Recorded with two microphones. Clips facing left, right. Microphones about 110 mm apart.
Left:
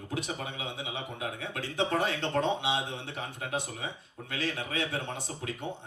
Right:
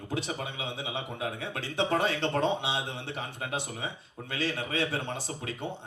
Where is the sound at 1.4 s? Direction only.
30° right (ahead or behind).